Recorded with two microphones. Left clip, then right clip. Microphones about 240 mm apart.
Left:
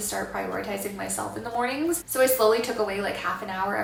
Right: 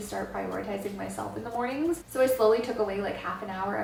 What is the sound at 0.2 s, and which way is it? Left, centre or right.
Speech, centre.